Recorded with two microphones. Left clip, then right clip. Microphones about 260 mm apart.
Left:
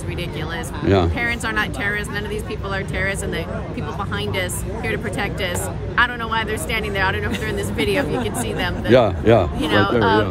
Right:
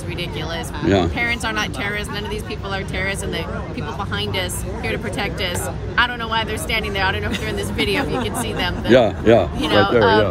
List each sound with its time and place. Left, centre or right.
0.8 s speech: left
1.1 s speech: centre
4.4 s speech: centre
8.9 s speech: left
9.6 s speech: centre